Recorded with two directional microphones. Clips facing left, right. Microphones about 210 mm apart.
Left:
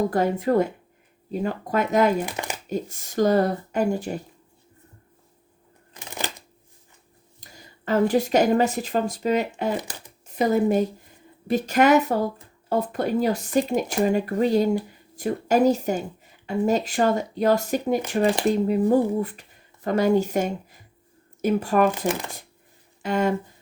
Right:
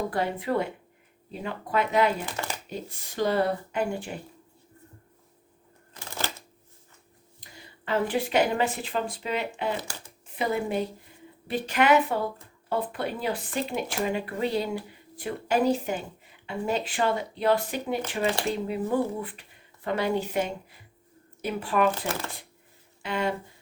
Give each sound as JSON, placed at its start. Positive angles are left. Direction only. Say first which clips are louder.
{"t": 0.1, "sound": "speech", "louder": "left 6 dB", "side_deg": 45}
{"t": 2.2, "sound": "shuffling cards", "louder": "left 3 dB", "side_deg": 15}
{"t": 2.6, "sound": "speech", "louder": "left 8 dB", "side_deg": 45}
{"t": 5.9, "sound": "shuffling cards", "louder": "left 2 dB", "side_deg": 15}
{"t": 7.4, "sound": "speech", "louder": "left 6 dB", "side_deg": 40}
{"t": 9.7, "sound": "speech", "louder": "left 5 dB", "side_deg": 15}
{"t": 10.2, "sound": "speech", "louder": "left 8 dB", "side_deg": 40}
{"t": 22.0, "sound": "speech", "louder": "left 6 dB", "side_deg": 15}
{"t": 23.0, "sound": "speech", "louder": "left 6 dB", "side_deg": 45}